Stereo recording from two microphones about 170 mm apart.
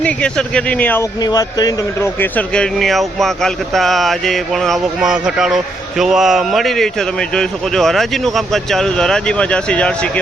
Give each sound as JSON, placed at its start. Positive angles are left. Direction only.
{"t": 0.0, "sound": "speech", "side_deg": 5}
{"t": 1.2, "sound": "speech", "side_deg": 25}
{"t": 2.3, "sound": "speech", "side_deg": 5}